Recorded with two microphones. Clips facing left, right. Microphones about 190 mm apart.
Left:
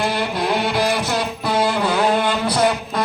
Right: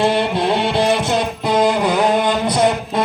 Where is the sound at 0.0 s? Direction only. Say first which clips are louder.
Right 5 dB; 25° right (ahead or behind).